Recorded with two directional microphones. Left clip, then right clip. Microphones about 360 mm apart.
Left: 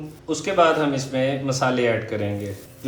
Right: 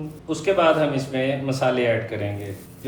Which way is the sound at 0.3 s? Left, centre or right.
Centre.